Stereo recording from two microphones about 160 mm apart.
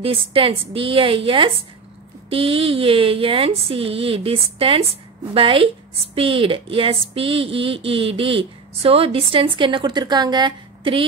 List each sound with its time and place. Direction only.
0.0 s a woman's voice: 35° right (ahead or behind)